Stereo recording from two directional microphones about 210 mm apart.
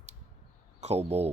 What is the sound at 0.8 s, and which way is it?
Speech, 30° right (ahead or behind).